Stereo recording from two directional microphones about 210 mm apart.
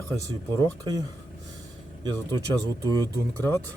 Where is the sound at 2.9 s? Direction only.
15° right (ahead or behind).